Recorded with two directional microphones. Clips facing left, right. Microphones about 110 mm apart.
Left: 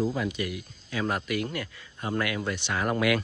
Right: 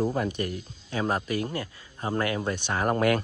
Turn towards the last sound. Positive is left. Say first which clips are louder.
# right 2 dB
turn(degrees=-40)  # may be behind; listen again after turning